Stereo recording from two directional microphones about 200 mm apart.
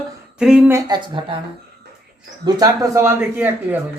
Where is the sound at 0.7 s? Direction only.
20° right (ahead or behind).